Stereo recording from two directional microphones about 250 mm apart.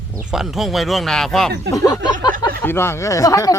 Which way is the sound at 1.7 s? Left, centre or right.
Centre.